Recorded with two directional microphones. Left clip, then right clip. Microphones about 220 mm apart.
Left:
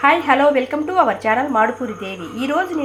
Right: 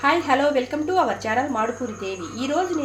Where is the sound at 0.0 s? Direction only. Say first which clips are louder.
Left 6 dB; 15° left (ahead or behind).